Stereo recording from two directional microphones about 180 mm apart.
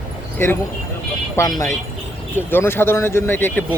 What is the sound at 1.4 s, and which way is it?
Speech, 15° left (ahead or behind).